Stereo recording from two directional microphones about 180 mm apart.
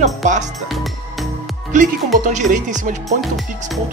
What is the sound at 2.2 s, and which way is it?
Speech, 45° right (ahead or behind).